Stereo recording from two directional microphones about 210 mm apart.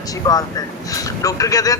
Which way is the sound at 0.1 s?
15° left (ahead or behind).